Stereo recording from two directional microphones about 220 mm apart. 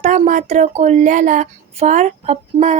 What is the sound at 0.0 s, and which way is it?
Speech, 35° right (ahead or behind).